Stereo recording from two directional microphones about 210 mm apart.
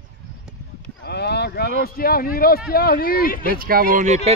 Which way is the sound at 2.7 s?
45° left (ahead or behind).